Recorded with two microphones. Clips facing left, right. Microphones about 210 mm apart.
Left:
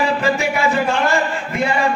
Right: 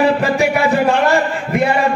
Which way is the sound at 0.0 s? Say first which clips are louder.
Right 4 dB; 60° right (ahead or behind).